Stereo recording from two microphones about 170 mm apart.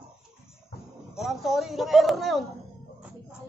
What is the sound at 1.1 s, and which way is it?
Speech, centre (ahead or behind).